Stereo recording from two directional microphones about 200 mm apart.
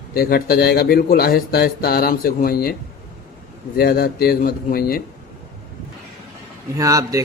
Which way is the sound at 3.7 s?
50° left (ahead or behind).